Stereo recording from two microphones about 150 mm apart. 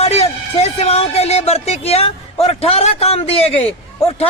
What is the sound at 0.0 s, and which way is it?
A man's voice, 45° left (ahead or behind).